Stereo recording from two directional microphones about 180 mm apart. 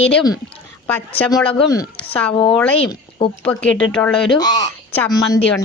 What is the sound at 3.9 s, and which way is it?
Speech, 5° left (ahead or behind).